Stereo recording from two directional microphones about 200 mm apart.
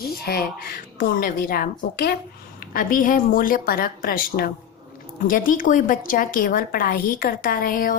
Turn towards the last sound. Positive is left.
turn(degrees=45)  # may be behind; listen again after turning